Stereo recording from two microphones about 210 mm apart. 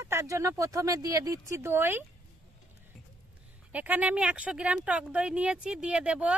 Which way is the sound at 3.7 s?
5° right (ahead or behind).